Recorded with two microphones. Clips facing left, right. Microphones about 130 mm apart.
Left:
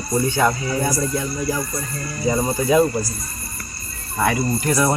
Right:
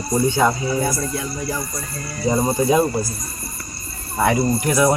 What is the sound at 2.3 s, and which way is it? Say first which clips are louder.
Speech: right 1 dB; 25° right (ahead or behind).